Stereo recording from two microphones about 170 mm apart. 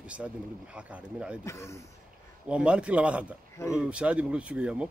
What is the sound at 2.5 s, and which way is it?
A man's voice, 5° right (ahead or behind).